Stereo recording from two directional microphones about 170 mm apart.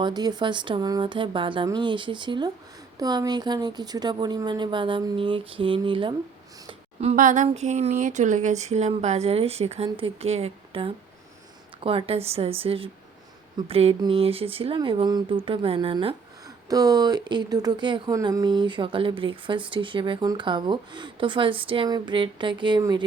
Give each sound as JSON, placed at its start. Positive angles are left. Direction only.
{"t": 0.0, "sound": "speech", "side_deg": -25}
{"t": 6.7, "sound": "a sound", "side_deg": -35}
{"t": 7.2, "sound": "speech", "side_deg": -50}
{"t": 16.6, "sound": "speech", "side_deg": -20}